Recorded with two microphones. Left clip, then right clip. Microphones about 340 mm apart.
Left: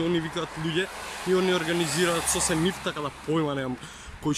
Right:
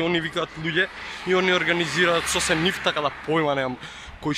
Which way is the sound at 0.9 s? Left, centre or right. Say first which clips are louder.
Right 1 dB; left.